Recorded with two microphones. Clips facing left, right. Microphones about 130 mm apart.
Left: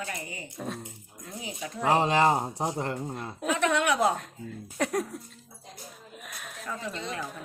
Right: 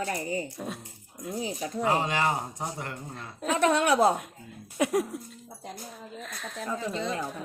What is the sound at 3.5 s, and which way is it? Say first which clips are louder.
Speech: right 4 dB; 35° right (ahead or behind).